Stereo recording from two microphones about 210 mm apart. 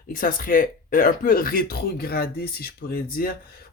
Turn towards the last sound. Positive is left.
turn(degrees=45)  # may be behind; listen again after turning